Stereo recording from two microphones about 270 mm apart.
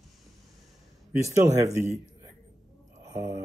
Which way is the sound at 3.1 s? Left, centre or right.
Centre.